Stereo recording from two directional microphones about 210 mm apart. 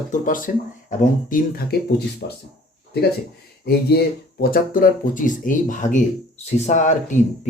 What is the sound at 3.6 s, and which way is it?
Speech, 50° left (ahead or behind).